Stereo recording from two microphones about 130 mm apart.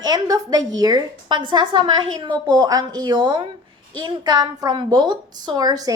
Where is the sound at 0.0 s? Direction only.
30° right (ahead or behind).